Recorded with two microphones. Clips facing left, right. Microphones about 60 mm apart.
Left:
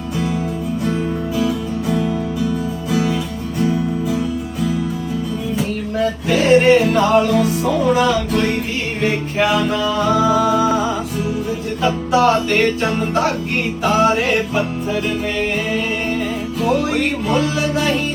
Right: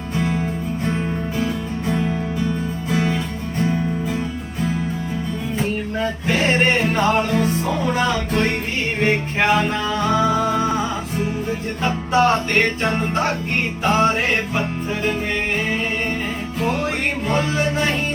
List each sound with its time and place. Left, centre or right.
1.4 s music: right
5.5 s music: right
11.8 s music: right
12.9 s a sound: right
16.6 s music: right
17.2 s a sound: right